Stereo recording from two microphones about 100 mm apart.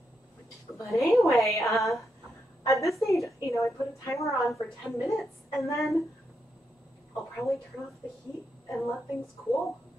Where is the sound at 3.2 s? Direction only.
30° left (ahead or behind).